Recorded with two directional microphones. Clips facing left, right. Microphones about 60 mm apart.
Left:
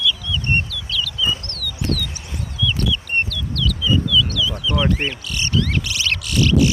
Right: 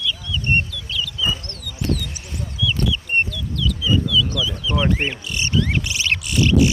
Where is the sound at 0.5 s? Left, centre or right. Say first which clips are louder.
Right 2 dB; right.